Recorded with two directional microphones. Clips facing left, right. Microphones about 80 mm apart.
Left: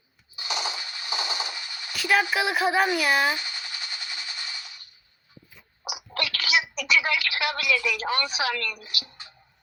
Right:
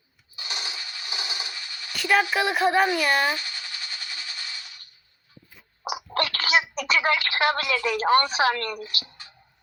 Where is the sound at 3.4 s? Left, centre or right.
Centre.